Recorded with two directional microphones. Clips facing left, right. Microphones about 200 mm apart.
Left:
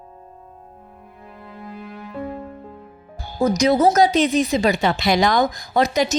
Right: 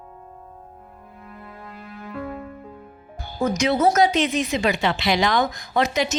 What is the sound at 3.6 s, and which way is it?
Speech, 35° left (ahead or behind).